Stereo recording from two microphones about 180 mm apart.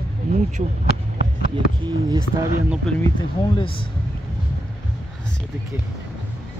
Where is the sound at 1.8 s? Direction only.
25° right (ahead or behind).